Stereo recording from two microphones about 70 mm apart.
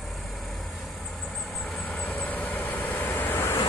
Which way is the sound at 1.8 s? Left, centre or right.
Centre.